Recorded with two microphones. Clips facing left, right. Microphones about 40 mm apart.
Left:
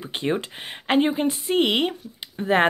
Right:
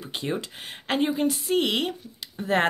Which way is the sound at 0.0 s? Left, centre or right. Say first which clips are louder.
Left 4 dB; left.